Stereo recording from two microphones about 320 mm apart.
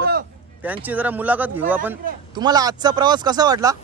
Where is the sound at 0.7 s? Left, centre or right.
Centre.